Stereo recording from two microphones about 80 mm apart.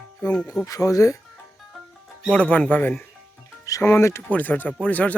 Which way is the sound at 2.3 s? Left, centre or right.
Centre.